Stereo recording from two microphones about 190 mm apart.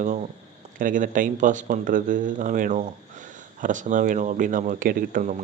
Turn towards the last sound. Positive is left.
turn(degrees=-45)  # may be behind; listen again after turning